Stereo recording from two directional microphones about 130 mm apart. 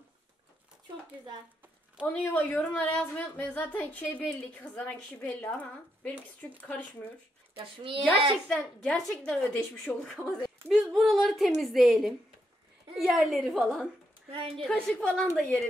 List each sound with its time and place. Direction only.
2.1 s a woman's voice: 10° left (ahead or behind)
7.5 s a woman's voice: 45° right (ahead or behind)
8.5 s a woman's voice: 5° left (ahead or behind)